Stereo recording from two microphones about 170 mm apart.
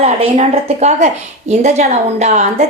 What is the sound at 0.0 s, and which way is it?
A woman's voice, 40° right (ahead or behind).